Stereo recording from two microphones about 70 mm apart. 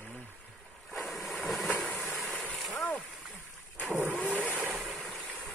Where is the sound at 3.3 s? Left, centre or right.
Left.